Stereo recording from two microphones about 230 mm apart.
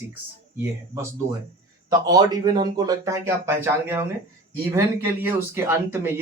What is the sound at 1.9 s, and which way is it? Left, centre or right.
Speech, centre.